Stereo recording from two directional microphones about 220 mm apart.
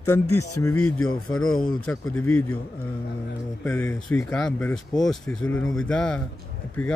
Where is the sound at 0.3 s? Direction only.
90° left.